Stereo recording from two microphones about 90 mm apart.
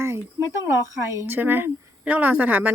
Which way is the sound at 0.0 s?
30° right (ahead or behind).